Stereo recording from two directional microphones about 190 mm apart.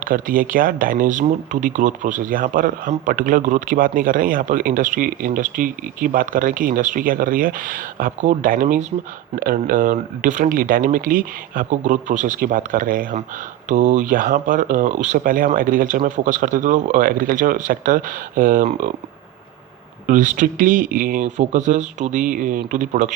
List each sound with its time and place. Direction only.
0.0 s speech: 45° right (ahead or behind)
20.1 s speech: 45° right (ahead or behind)